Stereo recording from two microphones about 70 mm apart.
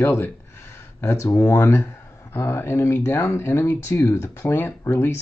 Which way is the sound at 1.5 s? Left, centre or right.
Left.